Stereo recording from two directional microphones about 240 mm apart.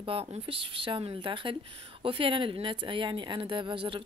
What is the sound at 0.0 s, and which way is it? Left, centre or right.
Speech, right.